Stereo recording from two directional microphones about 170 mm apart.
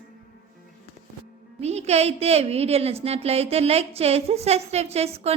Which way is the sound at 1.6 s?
40° right (ahead or behind).